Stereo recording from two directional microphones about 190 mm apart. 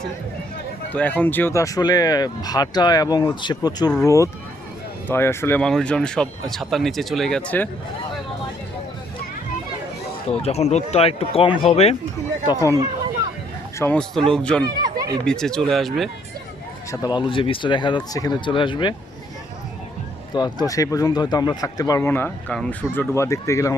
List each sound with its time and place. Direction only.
0.9 s speech: 10° left (ahead or behind)
10.2 s speech: 35° left (ahead or behind)
12.5 s speech: 20° left (ahead or behind)
13.7 s speech: 10° left (ahead or behind)
14.6 s speech: 20° right (ahead or behind)
15.2 s speech: 5° left (ahead or behind)
16.9 s speech: 20° left (ahead or behind)
20.3 s speech: 20° left (ahead or behind)